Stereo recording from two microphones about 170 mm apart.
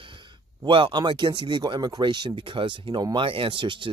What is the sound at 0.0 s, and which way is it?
Speech, 30° right (ahead or behind).